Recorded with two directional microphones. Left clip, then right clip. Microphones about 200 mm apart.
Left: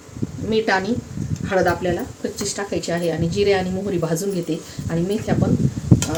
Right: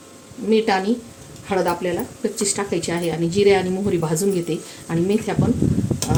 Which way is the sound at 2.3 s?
35° right (ahead or behind).